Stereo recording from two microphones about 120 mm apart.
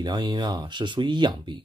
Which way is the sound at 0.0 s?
40° right (ahead or behind).